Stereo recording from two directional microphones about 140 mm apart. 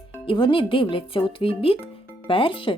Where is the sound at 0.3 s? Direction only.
35° left (ahead or behind).